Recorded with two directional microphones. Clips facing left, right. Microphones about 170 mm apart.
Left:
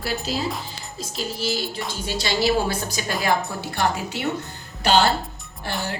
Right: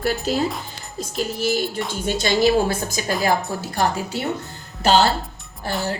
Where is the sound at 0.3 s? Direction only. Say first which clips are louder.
Right 4 dB; 50° right (ahead or behind).